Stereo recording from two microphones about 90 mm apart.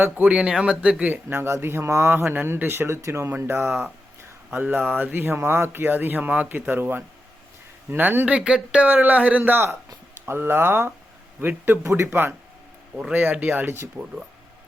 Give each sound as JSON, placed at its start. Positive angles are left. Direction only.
{"t": 0.0, "sound": "speech", "side_deg": -20}
{"t": 0.3, "sound": "speech", "side_deg": -10}
{"t": 10.2, "sound": "speech", "side_deg": -25}